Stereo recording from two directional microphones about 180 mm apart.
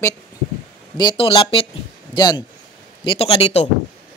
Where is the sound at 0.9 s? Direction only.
25° left (ahead or behind).